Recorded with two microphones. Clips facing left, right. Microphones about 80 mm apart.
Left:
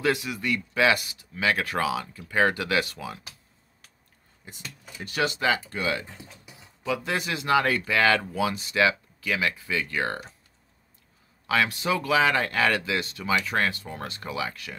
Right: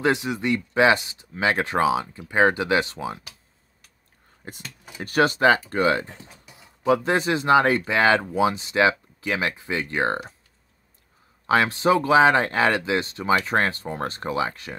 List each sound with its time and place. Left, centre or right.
0.0 s speech: right
4.4 s speech: right
6.0 s speech: right
11.4 s speech: right